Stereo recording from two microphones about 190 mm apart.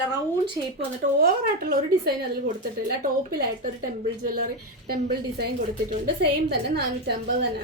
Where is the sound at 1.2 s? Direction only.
50° right (ahead or behind).